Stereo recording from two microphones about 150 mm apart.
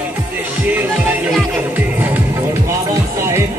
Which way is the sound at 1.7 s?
10° right (ahead or behind).